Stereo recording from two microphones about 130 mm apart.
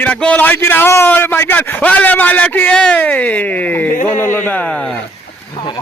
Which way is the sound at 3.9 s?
75° left (ahead or behind).